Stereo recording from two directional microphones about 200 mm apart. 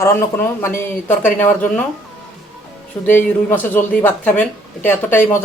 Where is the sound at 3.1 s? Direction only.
10° left (ahead or behind).